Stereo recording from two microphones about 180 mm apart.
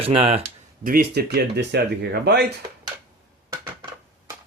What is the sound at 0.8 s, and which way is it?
Speech, 55° right (ahead or behind).